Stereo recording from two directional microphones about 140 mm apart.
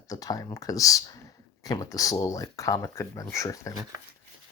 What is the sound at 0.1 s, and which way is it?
Speech, 25° left (ahead or behind).